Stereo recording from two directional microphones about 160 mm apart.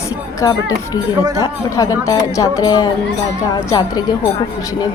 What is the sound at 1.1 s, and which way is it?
Speech, 20° right (ahead or behind).